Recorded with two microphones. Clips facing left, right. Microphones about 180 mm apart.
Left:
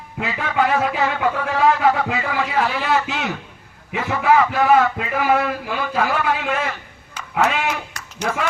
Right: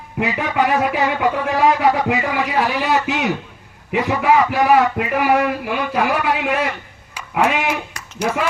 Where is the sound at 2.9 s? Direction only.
Centre (ahead or behind).